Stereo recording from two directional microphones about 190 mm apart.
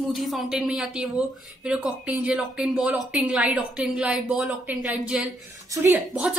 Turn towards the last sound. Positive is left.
turn(degrees=-10)  # may be behind; listen again after turning